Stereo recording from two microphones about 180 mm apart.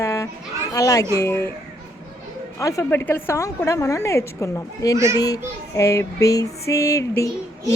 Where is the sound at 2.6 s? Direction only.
15° left (ahead or behind).